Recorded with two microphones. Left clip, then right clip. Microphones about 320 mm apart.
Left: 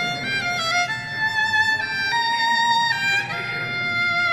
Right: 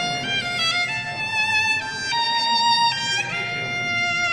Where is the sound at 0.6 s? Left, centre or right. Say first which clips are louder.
Even; centre.